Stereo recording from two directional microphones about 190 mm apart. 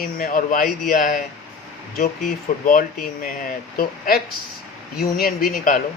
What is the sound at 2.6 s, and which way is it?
Speech, 45° left (ahead or behind).